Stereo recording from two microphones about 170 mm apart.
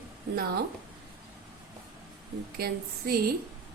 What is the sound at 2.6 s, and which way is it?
Speech, 65° right (ahead or behind).